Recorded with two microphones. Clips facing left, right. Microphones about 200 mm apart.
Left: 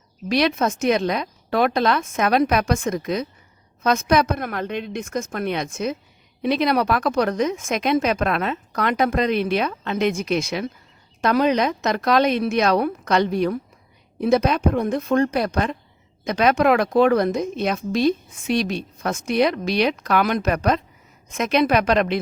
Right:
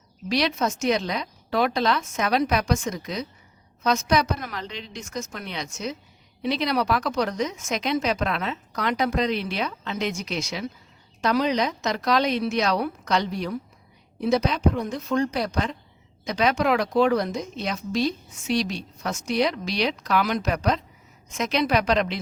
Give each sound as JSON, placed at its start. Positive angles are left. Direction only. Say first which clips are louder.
{"t": 0.3, "sound": "a woman's voice", "louder": "left 4 dB", "side_deg": 55}